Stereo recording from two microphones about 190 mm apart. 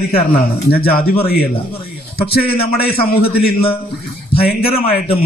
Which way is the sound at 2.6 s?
55° left (ahead or behind).